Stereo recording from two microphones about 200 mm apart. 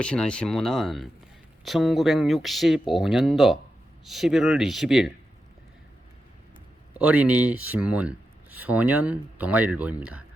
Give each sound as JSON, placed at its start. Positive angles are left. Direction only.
{"t": 0.0, "sound": "speech", "side_deg": 5}
{"t": 7.0, "sound": "speech", "side_deg": -5}